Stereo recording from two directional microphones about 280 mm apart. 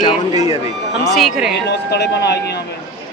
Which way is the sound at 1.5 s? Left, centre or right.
Left.